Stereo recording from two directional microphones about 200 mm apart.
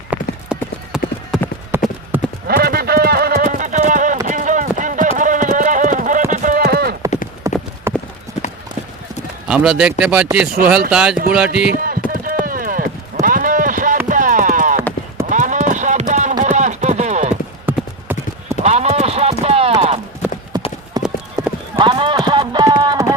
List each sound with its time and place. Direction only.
0.1 s clip-clop: 5° right (ahead or behind)
2.5 s clip-clop: 50° right (ahead or behind)
4.3 s a sound: 40° right (ahead or behind)
5.1 s clip-clop: 40° right (ahead or behind)
7.4 s clip-clop: 15° right (ahead or behind)
9.5 s speech: 5° right (ahead or behind)
11.7 s clip-clop: 45° right (ahead or behind)
14.1 s a sound: 40° right (ahead or behind)
15.3 s clip-clop: 40° right (ahead or behind)
17.7 s clip-clop: 10° right (ahead or behind)
18.6 s clip-clop: 35° right (ahead or behind)
22.8 s a sound: 20° right (ahead or behind)